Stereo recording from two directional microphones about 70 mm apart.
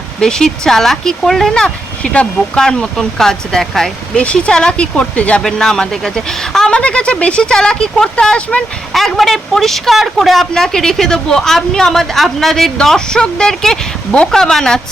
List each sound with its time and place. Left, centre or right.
0.2 s speech: centre
8.9 s speech: centre